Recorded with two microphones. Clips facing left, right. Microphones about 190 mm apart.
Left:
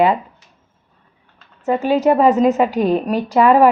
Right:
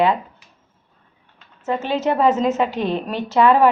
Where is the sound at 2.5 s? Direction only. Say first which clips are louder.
Left 5 dB; 40° left (ahead or behind).